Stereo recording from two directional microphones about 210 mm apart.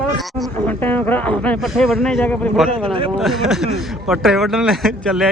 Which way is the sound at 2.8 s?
25° right (ahead or behind).